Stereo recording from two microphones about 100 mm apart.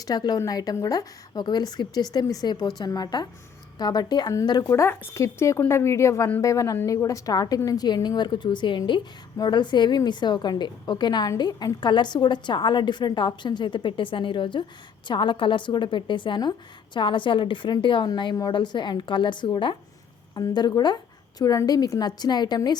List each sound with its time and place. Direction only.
0.0 s a woman's voice: 45° left (ahead or behind)
20.3 s a woman's voice: 40° left (ahead or behind)